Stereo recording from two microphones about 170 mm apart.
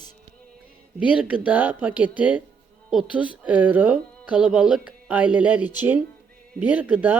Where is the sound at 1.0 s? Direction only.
5° right (ahead or behind).